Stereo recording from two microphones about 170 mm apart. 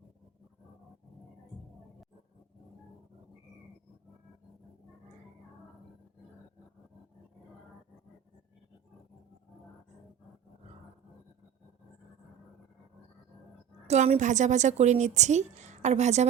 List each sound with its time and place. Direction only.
13.8 s a woman's voice: 40° right (ahead or behind)